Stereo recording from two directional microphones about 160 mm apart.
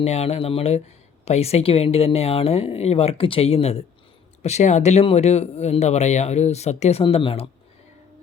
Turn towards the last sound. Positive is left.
turn(degrees=40)  # may be behind; listen again after turning